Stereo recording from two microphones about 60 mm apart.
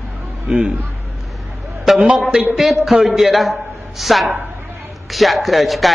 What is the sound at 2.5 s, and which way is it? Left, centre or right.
Speech, centre.